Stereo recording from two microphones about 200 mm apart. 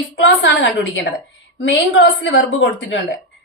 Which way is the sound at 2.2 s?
65° left (ahead or behind).